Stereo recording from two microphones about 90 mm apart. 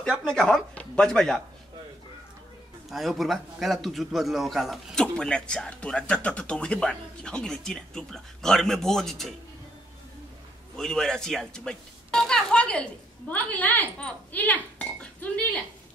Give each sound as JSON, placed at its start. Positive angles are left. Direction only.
{"t": 0.2, "sound": "speech", "side_deg": 5}
{"t": 2.9, "sound": "a man's voice", "side_deg": 0}
{"t": 10.8, "sound": "speech", "side_deg": 5}